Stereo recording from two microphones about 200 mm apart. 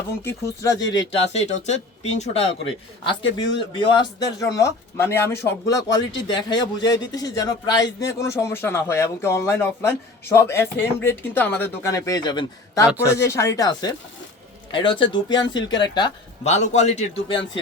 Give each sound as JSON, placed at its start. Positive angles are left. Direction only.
{"t": 0.2, "sound": "speech", "side_deg": 15}
{"t": 0.8, "sound": "speech", "side_deg": 60}
{"t": 1.6, "sound": "a man's voice", "side_deg": 35}
{"t": 3.1, "sound": "speech", "side_deg": 65}
{"t": 3.7, "sound": "speech", "side_deg": 25}
{"t": 12.9, "sound": "speech", "side_deg": -10}
{"t": 13.1, "sound": "speech", "side_deg": 15}
{"t": 16.4, "sound": "a man's voice", "side_deg": 35}